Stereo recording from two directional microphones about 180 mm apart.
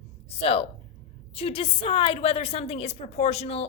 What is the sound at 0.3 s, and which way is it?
A woman's voice, 35° left (ahead or behind).